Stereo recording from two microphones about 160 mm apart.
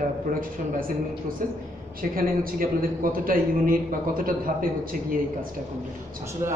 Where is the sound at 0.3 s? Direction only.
60° right (ahead or behind).